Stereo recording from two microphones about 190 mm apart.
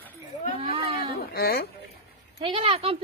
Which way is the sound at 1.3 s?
55° left (ahead or behind).